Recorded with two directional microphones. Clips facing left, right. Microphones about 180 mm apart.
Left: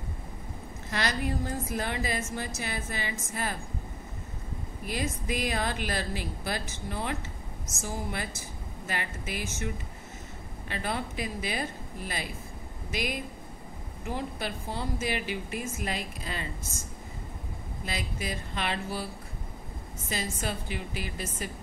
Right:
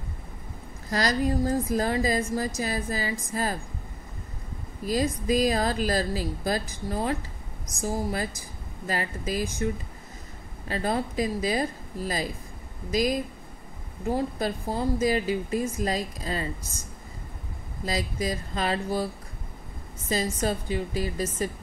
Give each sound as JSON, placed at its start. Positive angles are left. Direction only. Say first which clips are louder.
{"t": 0.8, "sound": "speech", "louder": "right 6 dB", "side_deg": -35}
{"t": 4.8, "sound": "speech", "louder": "right 8 dB", "side_deg": -35}
{"t": 10.7, "sound": "speech", "louder": "right 6 dB", "side_deg": -35}
{"t": 12.9, "sound": "speech", "louder": "right 8 dB", "side_deg": -35}
{"t": 17.8, "sound": "speech", "louder": "right 7 dB", "side_deg": -35}
{"t": 20.1, "sound": "speech", "louder": "right 7 dB", "side_deg": -35}